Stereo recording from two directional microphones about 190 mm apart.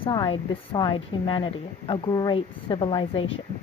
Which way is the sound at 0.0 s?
25° left (ahead or behind).